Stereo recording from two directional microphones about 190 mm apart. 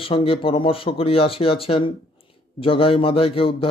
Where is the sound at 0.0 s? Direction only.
30° left (ahead or behind).